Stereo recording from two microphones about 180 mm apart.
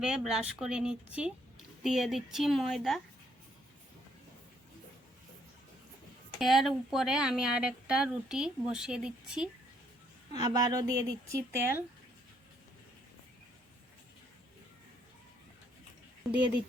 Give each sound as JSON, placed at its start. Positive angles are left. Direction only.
{"t": 0.0, "sound": "speech", "side_deg": -5}
{"t": 6.4, "sound": "speech", "side_deg": 0}
{"t": 10.3, "sound": "a woman's voice", "side_deg": -20}